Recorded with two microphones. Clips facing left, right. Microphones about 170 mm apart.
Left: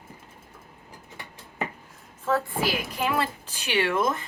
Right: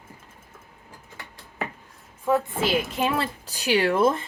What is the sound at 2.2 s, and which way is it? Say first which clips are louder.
Speech: right 3 dB; 20° right (ahead or behind).